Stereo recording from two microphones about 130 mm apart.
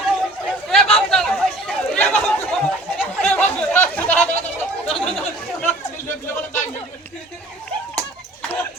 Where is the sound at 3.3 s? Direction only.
15° left (ahead or behind).